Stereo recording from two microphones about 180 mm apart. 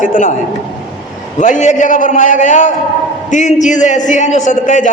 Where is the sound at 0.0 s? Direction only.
45° left (ahead or behind).